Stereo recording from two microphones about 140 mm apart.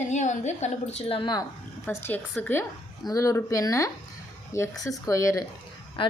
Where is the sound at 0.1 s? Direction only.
55° left (ahead or behind).